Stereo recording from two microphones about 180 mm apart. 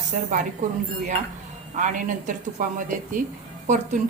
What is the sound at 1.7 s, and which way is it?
A woman's voice, 45° right (ahead or behind).